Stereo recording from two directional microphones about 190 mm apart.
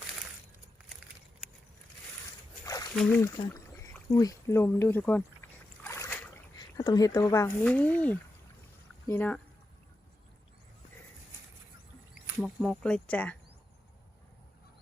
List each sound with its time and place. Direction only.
2.9 s speech: centre (ahead or behind)
3.2 s speech: 20° left (ahead or behind)
3.5 s a sound: 15° left (ahead or behind)
7.6 s speech: 5° left (ahead or behind)
12.4 s speech: 5° left (ahead or behind)